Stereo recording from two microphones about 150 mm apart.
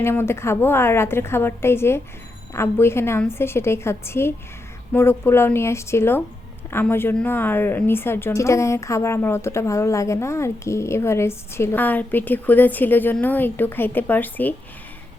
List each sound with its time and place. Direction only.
0.0 s a woman's voice: 15° left (ahead or behind)